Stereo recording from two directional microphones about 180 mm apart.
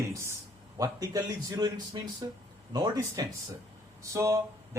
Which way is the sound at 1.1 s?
20° right (ahead or behind).